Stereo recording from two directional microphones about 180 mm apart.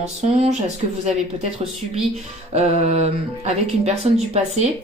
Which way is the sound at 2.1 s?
35° right (ahead or behind).